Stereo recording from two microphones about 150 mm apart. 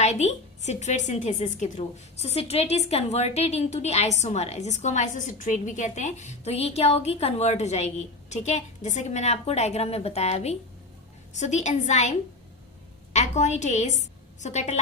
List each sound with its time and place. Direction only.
0.0 s speech: 50° left (ahead or behind)
13.1 s a woman's voice: 50° left (ahead or behind)